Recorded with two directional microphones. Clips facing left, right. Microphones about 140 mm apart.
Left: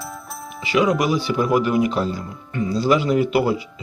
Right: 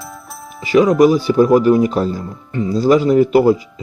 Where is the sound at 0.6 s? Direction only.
40° right (ahead or behind).